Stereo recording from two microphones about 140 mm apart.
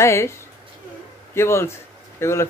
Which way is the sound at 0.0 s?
20° left (ahead or behind).